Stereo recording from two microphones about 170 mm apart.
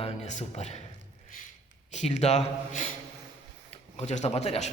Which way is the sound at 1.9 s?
40° left (ahead or behind).